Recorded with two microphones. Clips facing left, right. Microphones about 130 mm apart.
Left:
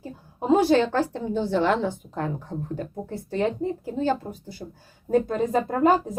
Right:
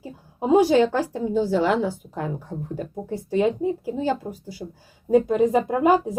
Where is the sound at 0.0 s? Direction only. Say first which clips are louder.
Right 3 dB; 15° right (ahead or behind).